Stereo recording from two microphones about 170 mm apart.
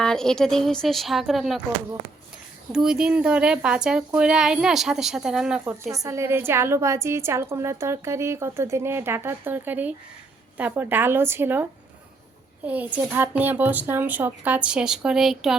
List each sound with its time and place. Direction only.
0.0 s speech: 5° left (ahead or behind)
2.7 s speech: 5° right (ahead or behind)
5.9 s a woman's voice: 20° right (ahead or behind)
12.6 s a woman's voice: 10° right (ahead or behind)